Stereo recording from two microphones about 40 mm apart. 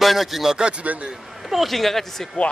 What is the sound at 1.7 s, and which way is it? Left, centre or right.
Speech, centre.